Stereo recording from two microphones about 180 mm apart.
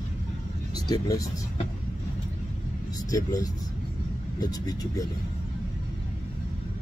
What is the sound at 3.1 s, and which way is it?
Speech, 20° left (ahead or behind).